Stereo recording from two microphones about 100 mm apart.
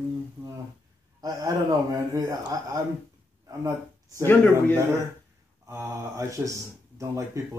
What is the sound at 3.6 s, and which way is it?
Speech, 35° right (ahead or behind).